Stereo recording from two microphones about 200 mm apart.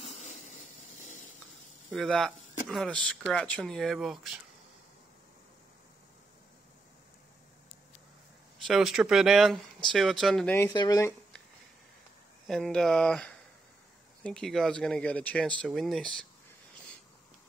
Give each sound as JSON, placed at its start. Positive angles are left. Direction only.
{"t": 0.0, "sound": "a sound", "side_deg": 35}
{"t": 1.9, "sound": "speech", "side_deg": 0}
{"t": 8.6, "sound": "speech", "side_deg": 0}
{"t": 10.7, "sound": "speech", "side_deg": 20}
{"t": 12.4, "sound": "speech", "side_deg": 5}